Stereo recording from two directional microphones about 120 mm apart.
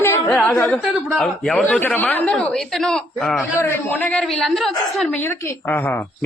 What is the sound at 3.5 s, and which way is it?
Speech, 20° left (ahead or behind).